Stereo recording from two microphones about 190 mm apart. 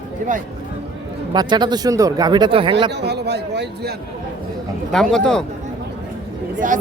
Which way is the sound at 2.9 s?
60° right (ahead or behind).